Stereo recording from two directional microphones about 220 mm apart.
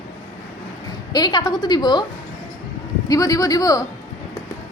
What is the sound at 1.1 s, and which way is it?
Speech, 20° left (ahead or behind).